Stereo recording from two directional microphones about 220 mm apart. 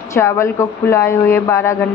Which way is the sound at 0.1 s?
10° left (ahead or behind).